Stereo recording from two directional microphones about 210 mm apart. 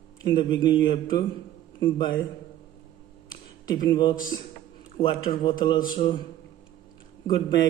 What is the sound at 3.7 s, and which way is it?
Speech, 20° left (ahead or behind).